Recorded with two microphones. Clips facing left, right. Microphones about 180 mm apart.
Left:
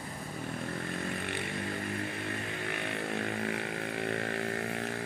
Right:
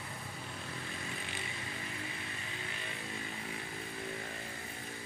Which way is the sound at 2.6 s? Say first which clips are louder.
Left 9 dB; 65° left (ahead or behind).